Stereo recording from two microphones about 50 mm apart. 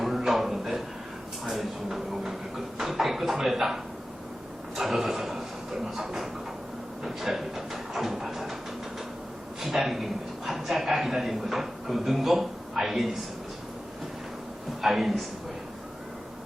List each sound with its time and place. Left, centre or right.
0.0 s a sound: centre
4.8 s speech: centre
9.6 s a man's voice: centre
14.8 s speech: centre